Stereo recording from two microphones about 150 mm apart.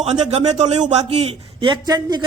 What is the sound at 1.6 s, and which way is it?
Speech, 30° right (ahead or behind).